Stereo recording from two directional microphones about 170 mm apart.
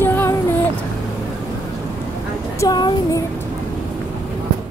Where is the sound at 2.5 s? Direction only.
25° left (ahead or behind).